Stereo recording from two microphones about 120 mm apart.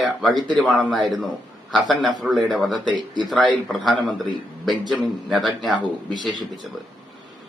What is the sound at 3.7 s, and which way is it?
A man's voice, centre (ahead or behind).